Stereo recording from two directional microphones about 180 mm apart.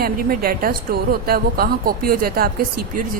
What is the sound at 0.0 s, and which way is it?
A woman's voice, 55° right (ahead or behind).